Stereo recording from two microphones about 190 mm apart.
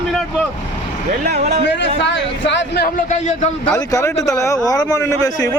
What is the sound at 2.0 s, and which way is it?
Speech, 70° left (ahead or behind).